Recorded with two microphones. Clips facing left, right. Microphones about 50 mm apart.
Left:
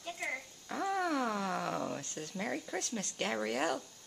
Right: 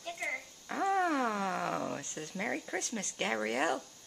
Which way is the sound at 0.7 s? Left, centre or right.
Centre.